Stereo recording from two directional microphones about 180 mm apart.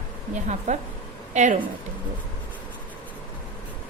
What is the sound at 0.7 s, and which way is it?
Speech, 40° right (ahead or behind).